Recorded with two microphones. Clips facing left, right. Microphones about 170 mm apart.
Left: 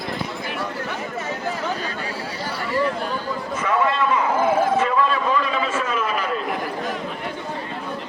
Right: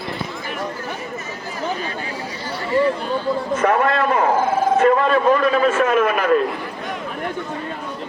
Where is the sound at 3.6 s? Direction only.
60° right (ahead or behind).